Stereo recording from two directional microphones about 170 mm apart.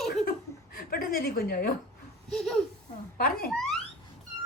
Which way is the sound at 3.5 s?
5° left (ahead or behind).